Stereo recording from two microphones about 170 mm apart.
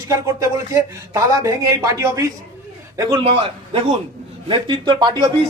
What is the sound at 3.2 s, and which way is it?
A woman's voice, 35° right (ahead or behind).